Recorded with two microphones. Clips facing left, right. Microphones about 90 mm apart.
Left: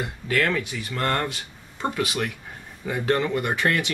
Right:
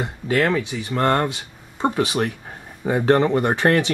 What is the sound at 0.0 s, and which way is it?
Speech, 25° right (ahead or behind).